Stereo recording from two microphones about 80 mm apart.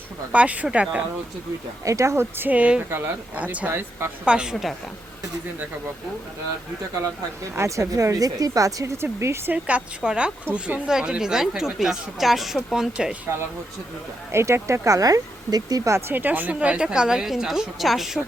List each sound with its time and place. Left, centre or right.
0.3 s speech: centre
1.8 s speech: right
2.5 s speech: centre
7.5 s speech: right
9.5 s speech: centre
14.3 s speech: right; by 18.2 s centre